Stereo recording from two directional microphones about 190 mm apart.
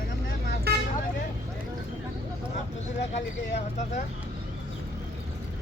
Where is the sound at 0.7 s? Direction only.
55° right (ahead or behind).